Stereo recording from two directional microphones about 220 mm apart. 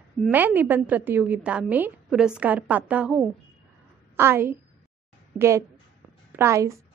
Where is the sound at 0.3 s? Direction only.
10° right (ahead or behind).